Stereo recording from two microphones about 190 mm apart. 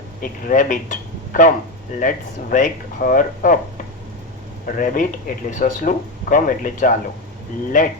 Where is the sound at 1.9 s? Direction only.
45° left (ahead or behind).